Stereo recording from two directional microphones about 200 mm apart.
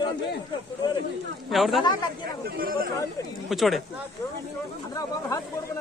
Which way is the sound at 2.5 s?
50° right (ahead or behind).